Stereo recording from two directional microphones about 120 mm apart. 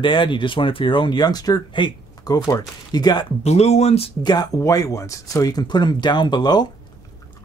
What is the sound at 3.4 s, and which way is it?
Speech, 65° left (ahead or behind).